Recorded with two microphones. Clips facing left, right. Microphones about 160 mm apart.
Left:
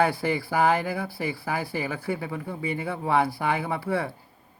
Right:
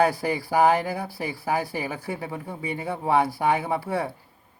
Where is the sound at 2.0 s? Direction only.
25° right (ahead or behind).